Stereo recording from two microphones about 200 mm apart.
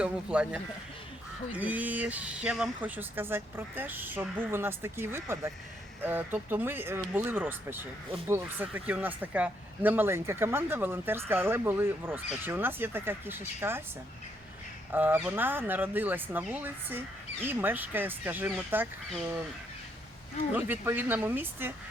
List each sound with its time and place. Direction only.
0.0 s speech: 5° right (ahead or behind)
14.9 s speech: 10° right (ahead or behind)
20.5 s speech: 10° right (ahead or behind)